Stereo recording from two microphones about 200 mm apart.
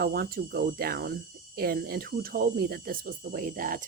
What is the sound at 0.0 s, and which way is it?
Speech, 50° right (ahead or behind).